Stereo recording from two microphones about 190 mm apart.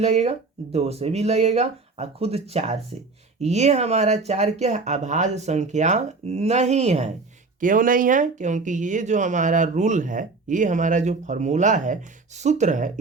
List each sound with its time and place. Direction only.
0.0 s speech: 35° right (ahead or behind)